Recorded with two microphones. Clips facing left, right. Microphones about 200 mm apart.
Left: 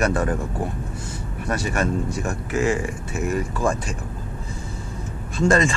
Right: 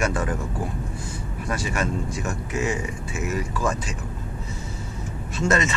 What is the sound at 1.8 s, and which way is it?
Speech, 55° left (ahead or behind).